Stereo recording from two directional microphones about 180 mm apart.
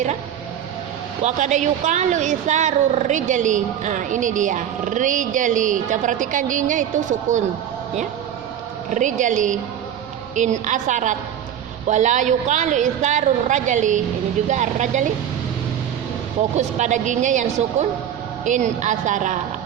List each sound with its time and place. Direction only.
1.2 s speech: 40° right (ahead or behind)
8.9 s speech: 45° right (ahead or behind)
16.6 s a woman's voice: 40° right (ahead or behind)